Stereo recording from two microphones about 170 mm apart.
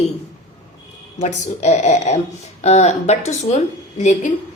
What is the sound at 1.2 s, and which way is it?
A woman's voice, 40° left (ahead or behind).